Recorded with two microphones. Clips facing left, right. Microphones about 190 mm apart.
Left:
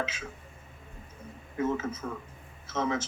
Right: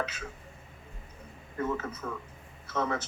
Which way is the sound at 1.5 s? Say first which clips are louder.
Left 3 dB; 55° right (ahead or behind).